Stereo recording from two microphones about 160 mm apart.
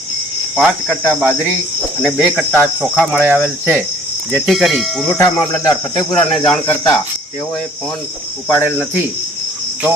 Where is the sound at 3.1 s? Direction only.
10° right (ahead or behind).